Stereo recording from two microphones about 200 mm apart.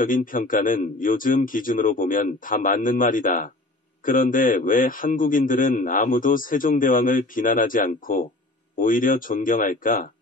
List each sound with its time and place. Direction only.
0.0 s a man's voice: 45° left (ahead or behind)